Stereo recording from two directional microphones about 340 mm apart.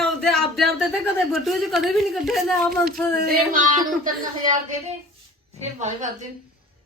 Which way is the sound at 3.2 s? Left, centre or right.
Right.